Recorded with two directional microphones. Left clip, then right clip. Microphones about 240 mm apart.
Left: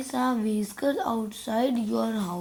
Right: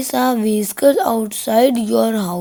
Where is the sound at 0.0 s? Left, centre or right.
Right.